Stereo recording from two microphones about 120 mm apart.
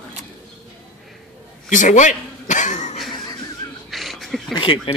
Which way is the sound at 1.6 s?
90° left.